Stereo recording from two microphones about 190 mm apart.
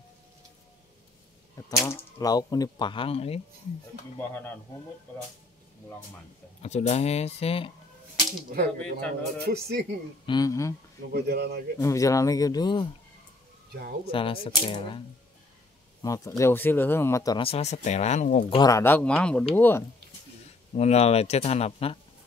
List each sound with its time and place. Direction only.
1.7 s speech: 15° left (ahead or behind); by 3.3 s 30° left (ahead or behind)
6.6 s speech: 35° left (ahead or behind)
8.5 s speech: 50° right (ahead or behind)
10.2 s speech: 20° left (ahead or behind)
11.1 s speech: 60° right (ahead or behind)
11.8 s speech: 15° left (ahead or behind)
14.0 s speech: 30° left (ahead or behind)
16.0 s speech: 15° left (ahead or behind); by 18.6 s 40° left (ahead or behind)
18.6 s speech: 15° left (ahead or behind)
20.7 s speech: 35° left (ahead or behind)